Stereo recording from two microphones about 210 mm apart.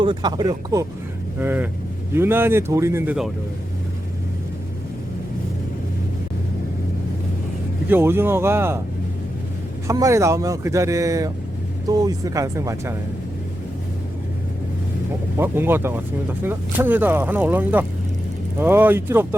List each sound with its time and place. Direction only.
0.0 s speech: 20° right (ahead or behind)
7.9 s speech: 10° right (ahead or behind)
9.8 s speech: 15° right (ahead or behind)
15.4 s speech: 10° right (ahead or behind)